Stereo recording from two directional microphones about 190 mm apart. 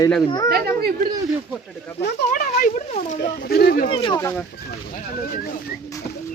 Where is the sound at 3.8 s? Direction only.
30° left (ahead or behind).